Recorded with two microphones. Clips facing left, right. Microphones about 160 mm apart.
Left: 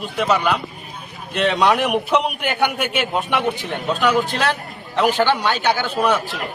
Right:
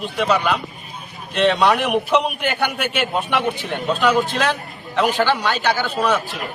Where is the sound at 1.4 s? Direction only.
10° left (ahead or behind).